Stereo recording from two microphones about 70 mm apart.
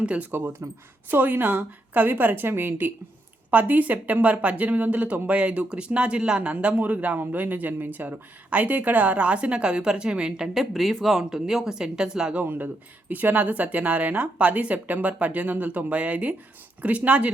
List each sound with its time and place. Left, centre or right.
0.0 s speech: centre
0.3 s speech: right; by 12.5 s centre
12.5 s speech: right